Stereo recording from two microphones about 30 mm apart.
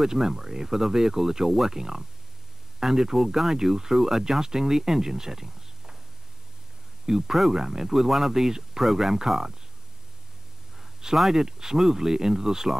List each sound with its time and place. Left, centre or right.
0.0 s speech: centre
7.1 s speech: centre
10.8 s a sound: centre
11.1 s speech: centre
11.4 s speech: centre